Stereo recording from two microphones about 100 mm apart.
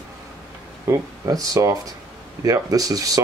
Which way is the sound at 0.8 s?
35° right (ahead or behind).